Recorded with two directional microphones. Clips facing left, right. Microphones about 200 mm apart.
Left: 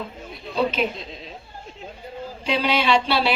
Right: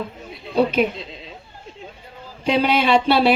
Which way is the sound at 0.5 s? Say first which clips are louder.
Right 5 dB; 55° right (ahead or behind).